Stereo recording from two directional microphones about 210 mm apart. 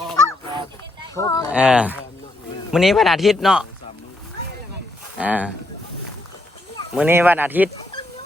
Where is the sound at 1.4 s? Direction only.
5° right (ahead or behind).